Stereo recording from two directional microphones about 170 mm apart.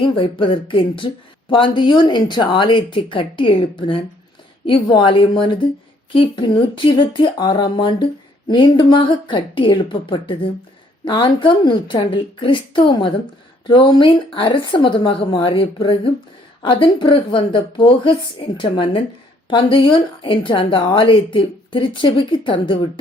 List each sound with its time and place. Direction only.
0.0 s speech: 30° left (ahead or behind)